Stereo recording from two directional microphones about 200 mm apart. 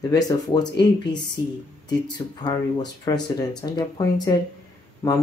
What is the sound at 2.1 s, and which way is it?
Speech, 20° left (ahead or behind).